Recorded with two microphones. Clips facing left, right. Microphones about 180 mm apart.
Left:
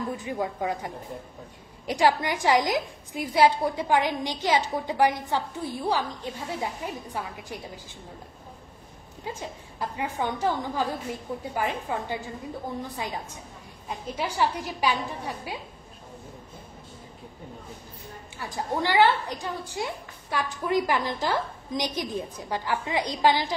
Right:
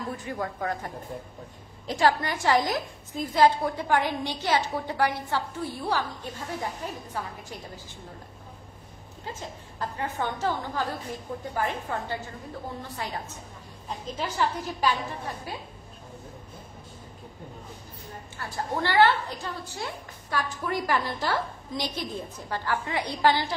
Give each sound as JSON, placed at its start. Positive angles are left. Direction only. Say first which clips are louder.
{"t": 0.2, "sound": "a woman's voice", "louder": "left 2 dB", "side_deg": 15}
{"t": 9.2, "sound": "a woman's voice", "louder": "left 3 dB", "side_deg": 15}
{"t": 18.4, "sound": "a woman's voice", "louder": "left 1 dB", "side_deg": 15}